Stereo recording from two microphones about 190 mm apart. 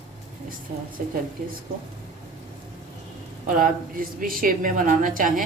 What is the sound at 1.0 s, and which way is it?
Speech, 45° right (ahead or behind).